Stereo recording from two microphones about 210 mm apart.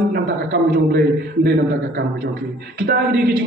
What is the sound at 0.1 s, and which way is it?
A man's voice, 50° right (ahead or behind).